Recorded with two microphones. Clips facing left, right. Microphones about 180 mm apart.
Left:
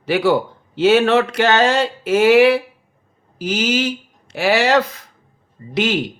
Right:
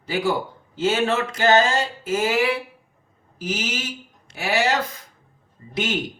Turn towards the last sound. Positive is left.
turn(degrees=75)  # may be behind; listen again after turning